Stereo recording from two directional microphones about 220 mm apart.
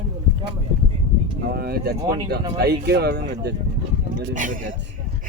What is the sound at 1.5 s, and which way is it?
Speech, 45° right (ahead or behind).